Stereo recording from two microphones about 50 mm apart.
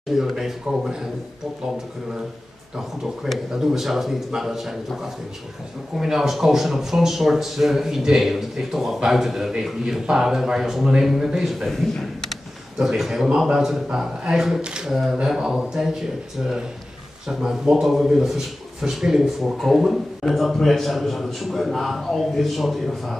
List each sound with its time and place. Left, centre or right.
0.1 s speech: centre
3.5 s speech: centre
12.8 s a man's voice: centre
14.9 s a man's voice: centre
17.3 s a man's voice: centre